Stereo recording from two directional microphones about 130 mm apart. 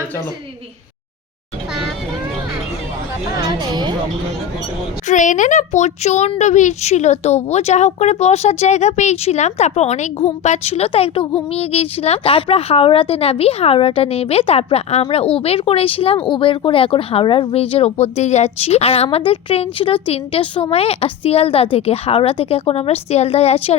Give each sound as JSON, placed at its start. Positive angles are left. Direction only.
{"t": 3.3, "sound": "speech", "side_deg": -30}
{"t": 5.0, "sound": "a woman's voice", "side_deg": 75}
{"t": 18.0, "sound": "a woman's voice", "side_deg": 60}